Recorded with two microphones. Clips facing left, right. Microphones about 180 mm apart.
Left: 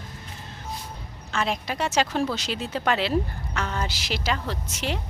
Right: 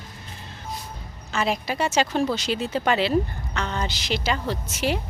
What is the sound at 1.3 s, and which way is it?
Speech, 5° right (ahead or behind).